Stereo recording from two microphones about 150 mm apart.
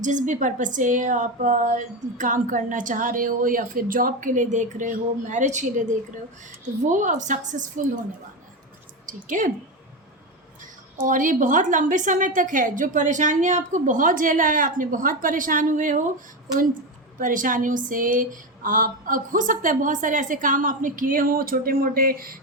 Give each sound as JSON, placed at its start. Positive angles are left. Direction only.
{"t": 0.0, "sound": "speech", "side_deg": -55}
{"t": 9.0, "sound": "a woman's voice", "side_deg": -60}
{"t": 10.6, "sound": "speech", "side_deg": -60}
{"t": 17.2, "sound": "speech", "side_deg": -65}